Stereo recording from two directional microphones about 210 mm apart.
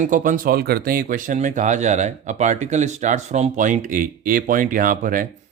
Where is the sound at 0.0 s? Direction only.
40° right (ahead or behind).